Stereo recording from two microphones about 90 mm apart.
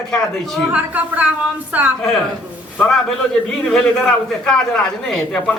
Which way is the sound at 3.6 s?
5° left (ahead or behind).